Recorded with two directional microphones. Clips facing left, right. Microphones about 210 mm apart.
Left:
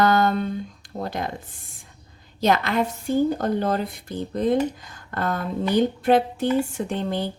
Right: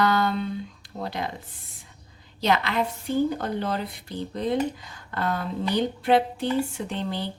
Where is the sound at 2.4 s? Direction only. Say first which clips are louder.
Left 3 dB; 45° left (ahead or behind).